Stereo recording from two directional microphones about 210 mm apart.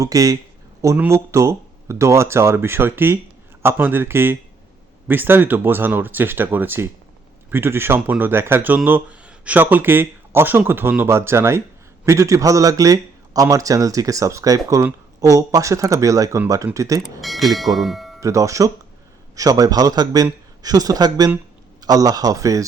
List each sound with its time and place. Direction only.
0.0 s a man's voice: 15° right (ahead or behind)
17.0 s speech: centre (ahead or behind)
18.2 s a man's voice: 15° right (ahead or behind)